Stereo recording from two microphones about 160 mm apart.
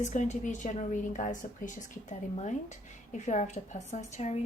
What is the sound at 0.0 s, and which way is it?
A woman's voice, 50° left (ahead or behind).